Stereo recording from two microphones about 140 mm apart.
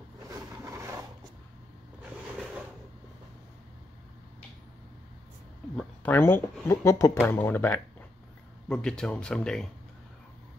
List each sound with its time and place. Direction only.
0.3 s vehicle: 20° right (ahead or behind)
6.0 s speech: 15° left (ahead or behind)